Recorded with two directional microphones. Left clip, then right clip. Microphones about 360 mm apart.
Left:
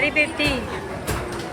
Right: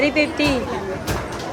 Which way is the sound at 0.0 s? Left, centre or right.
Centre.